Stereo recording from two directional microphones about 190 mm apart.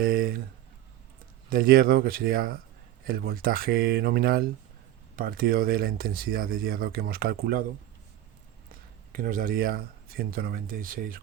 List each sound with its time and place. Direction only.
0.0 s speech: 50° right (ahead or behind)
1.5 s speech: 50° right (ahead or behind)
8.7 s speech: 45° right (ahead or behind)